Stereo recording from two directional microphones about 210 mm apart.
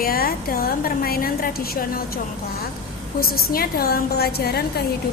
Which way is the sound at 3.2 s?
45° left (ahead or behind).